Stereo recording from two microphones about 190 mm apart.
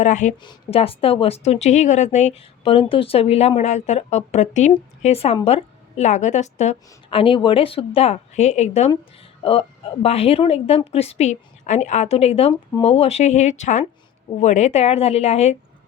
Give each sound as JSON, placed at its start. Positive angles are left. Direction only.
{"t": 0.0, "sound": "a woman's voice", "side_deg": 40}